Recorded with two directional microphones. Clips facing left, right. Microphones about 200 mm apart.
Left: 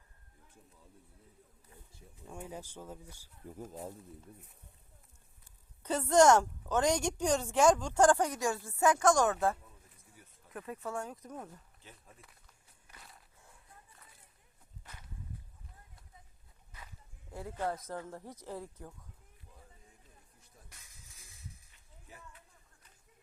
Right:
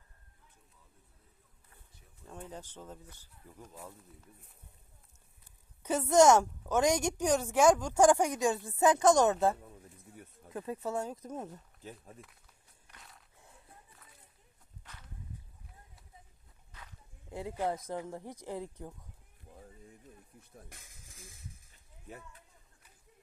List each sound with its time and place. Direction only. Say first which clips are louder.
2.2 s speech: left 1 dB; 10° left (ahead or behind)
3.7 s speech: left 4 dB; 35° left (ahead or behind)
5.8 s a woman's voice: right 1 dB; 10° right (ahead or behind)
12.9 s walk: even; centre (ahead or behind)
17.3 s a woman's voice: right 3 dB; 15° right (ahead or behind)